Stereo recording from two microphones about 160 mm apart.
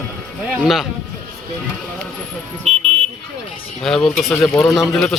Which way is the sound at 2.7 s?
45° right (ahead or behind).